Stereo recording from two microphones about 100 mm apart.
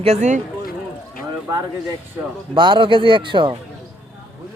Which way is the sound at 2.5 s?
55° right (ahead or behind).